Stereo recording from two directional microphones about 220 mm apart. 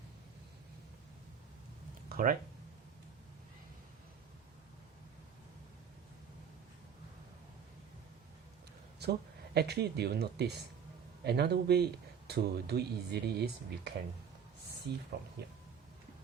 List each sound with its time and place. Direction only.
2.0 s a sound: 40° right (ahead or behind)
9.0 s speech: 50° right (ahead or behind)
15.1 s speech: 50° right (ahead or behind)